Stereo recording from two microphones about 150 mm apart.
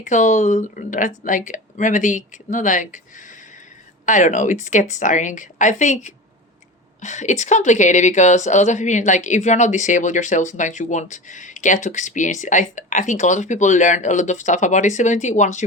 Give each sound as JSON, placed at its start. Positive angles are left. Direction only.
{"t": 0.0, "sound": "a woman's voice", "side_deg": 55}